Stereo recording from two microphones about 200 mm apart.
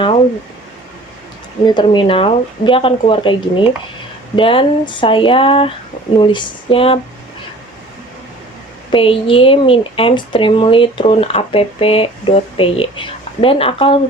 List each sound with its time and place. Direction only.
1.6 s a woman's voice: 25° left (ahead or behind)
8.9 s a woman's voice: 25° left (ahead or behind)